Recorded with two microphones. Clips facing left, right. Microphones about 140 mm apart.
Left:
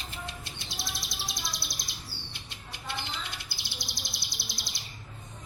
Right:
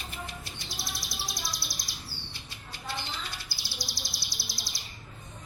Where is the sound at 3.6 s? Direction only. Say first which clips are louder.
Right 1 dB; 20° left (ahead or behind).